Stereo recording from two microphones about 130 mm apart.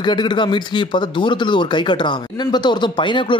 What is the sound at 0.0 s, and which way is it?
Speech, 35° left (ahead or behind).